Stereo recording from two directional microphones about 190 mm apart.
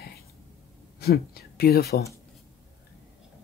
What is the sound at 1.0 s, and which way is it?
Speech, 55° left (ahead or behind).